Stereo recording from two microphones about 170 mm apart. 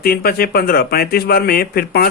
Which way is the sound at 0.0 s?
65° left (ahead or behind).